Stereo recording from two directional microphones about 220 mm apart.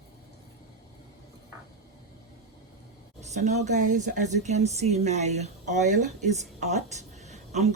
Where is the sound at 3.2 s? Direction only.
30° right (ahead or behind).